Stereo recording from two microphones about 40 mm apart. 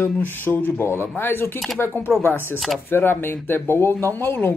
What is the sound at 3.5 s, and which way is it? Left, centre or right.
Speech, left.